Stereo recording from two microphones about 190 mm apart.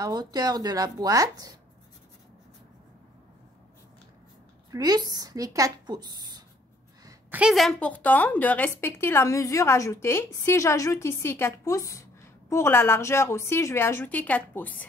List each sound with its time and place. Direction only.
0.0 s speech: 20° right (ahead or behind)
4.7 s speech: 20° right (ahead or behind)
7.1 s a woman's voice: 10° right (ahead or behind); by 14.9 s 10° left (ahead or behind)